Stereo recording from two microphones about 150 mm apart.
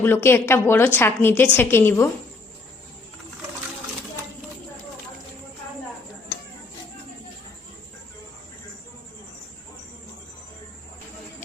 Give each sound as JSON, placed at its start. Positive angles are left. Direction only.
{"t": 0.0, "sound": "a woman's voice", "side_deg": 15}